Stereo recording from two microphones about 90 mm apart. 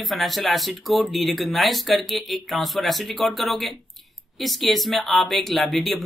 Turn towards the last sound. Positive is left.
turn(degrees=0)  # may be behind; listen again after turning